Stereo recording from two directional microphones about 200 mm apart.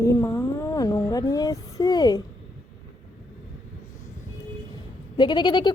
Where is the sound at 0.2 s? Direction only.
15° left (ahead or behind).